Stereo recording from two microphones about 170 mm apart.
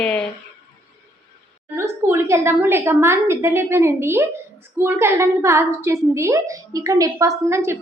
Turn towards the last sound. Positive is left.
turn(degrees=-15)  # may be behind; listen again after turning